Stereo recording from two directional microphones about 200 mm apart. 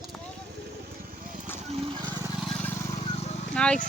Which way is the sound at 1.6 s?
30° right (ahead or behind).